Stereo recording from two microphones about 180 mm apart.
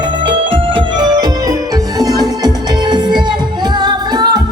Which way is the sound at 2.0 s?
20° right (ahead or behind).